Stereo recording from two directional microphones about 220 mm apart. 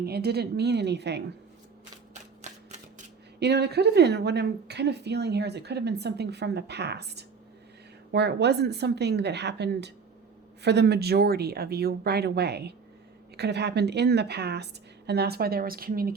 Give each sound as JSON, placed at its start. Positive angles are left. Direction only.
{"t": 0.0, "sound": "a woman's voice", "side_deg": -45}
{"t": 2.4, "sound": "typewriter", "side_deg": -30}
{"t": 3.4, "sound": "a woman's voice", "side_deg": -50}